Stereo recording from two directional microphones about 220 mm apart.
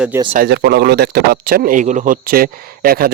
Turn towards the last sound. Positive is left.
turn(degrees=-45)  # may be behind; listen again after turning